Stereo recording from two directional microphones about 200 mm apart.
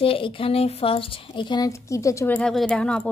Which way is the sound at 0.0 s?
25° left (ahead or behind).